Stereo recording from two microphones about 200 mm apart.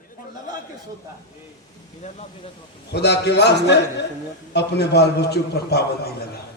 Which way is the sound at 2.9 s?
55° left (ahead or behind).